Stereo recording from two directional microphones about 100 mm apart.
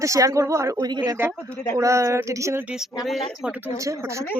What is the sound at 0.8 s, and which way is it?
Speech, 40° right (ahead or behind).